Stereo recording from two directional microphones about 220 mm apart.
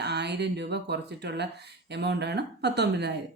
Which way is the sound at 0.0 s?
50° right (ahead or behind).